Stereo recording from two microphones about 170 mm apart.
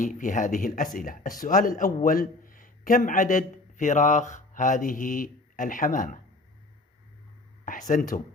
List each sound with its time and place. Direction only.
0.0 s a man's voice: 50° left (ahead or behind)
7.6 s a man's voice: 50° left (ahead or behind)